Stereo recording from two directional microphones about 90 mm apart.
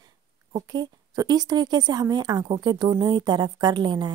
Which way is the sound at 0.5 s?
50° right (ahead or behind).